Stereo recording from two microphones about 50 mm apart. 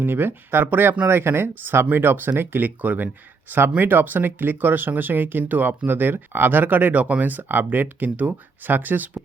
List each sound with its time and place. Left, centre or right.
0.0 s speech: right